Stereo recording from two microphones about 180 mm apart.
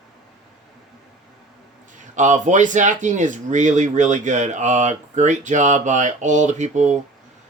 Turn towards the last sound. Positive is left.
turn(degrees=-40)  # may be behind; listen again after turning